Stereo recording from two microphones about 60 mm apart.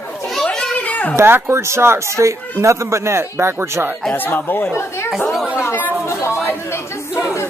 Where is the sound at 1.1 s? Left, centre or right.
Right.